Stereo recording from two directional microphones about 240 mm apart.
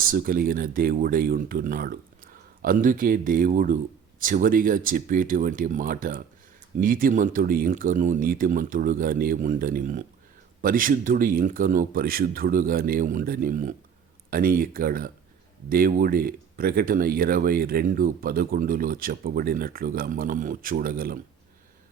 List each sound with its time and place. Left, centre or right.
0.0 s speech: right